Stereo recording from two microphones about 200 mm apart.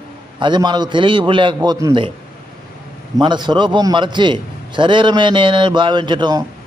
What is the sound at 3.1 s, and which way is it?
A man's voice, 20° right (ahead or behind).